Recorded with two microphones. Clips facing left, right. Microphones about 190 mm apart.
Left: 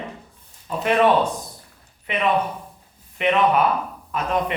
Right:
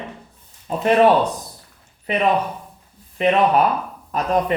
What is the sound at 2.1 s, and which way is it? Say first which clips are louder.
Speech: right 2 dB; 35° right (ahead or behind).